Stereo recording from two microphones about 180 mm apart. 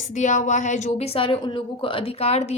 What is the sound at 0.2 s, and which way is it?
Speech, 40° left (ahead or behind).